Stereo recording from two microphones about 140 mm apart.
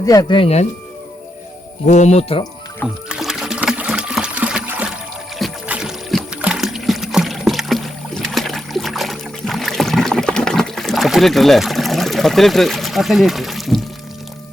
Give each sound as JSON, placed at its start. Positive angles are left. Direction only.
{"t": 0.0, "sound": "speech", "side_deg": 25}
{"t": 1.9, "sound": "speech", "side_deg": 55}
{"t": 3.1, "sound": "trickle", "side_deg": -5}
{"t": 5.6, "sound": "a sound", "side_deg": -5}
{"t": 6.4, "sound": "rowboat", "side_deg": -5}